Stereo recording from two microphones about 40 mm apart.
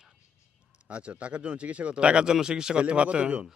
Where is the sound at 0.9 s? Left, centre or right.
Right.